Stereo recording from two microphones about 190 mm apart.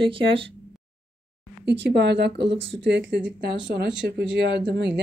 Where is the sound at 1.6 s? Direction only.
65° right (ahead or behind).